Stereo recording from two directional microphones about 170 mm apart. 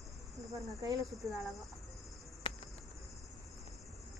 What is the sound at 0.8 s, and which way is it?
Speech, 20° right (ahead or behind).